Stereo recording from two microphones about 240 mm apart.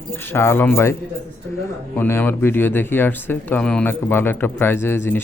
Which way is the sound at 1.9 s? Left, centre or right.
Centre.